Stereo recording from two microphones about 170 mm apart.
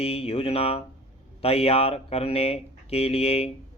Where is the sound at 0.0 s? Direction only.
35° left (ahead or behind).